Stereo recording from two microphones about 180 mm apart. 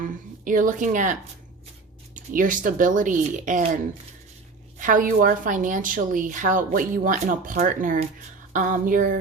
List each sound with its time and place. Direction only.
0.0 s a woman's voice: 50° right (ahead or behind)
2.1 s a woman's voice: 50° right (ahead or behind)
4.8 s a woman's voice: 50° right (ahead or behind)